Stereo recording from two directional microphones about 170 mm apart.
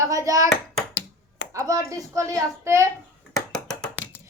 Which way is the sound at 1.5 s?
20° right (ahead or behind).